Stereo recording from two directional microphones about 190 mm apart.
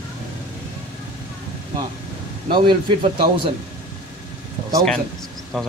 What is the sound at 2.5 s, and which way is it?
Speech, 25° right (ahead or behind).